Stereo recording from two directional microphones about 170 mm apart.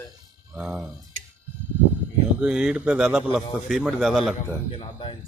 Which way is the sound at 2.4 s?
5° right (ahead or behind).